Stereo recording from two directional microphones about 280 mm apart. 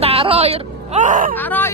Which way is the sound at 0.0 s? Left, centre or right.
Right.